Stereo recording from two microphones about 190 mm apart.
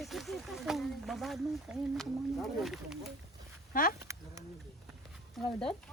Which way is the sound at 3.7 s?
50° left (ahead or behind).